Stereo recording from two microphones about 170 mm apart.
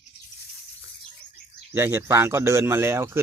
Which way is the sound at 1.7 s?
15° right (ahead or behind).